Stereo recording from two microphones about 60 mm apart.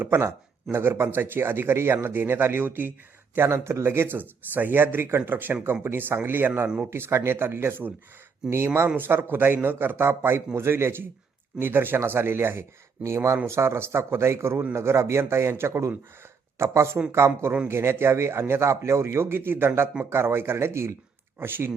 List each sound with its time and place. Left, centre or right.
0.0 s speech: right
3.3 s a man's voice: right
13.1 s a man's voice: right